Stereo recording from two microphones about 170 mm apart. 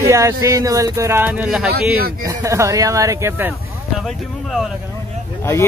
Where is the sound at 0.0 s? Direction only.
15° right (ahead or behind).